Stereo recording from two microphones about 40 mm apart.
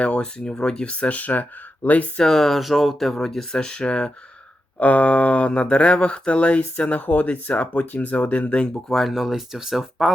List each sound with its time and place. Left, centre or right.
0.0 s speech: left
2.1 s speech: centre
4.8 s speech: left
6.9 s speech: left
9.0 s speech: centre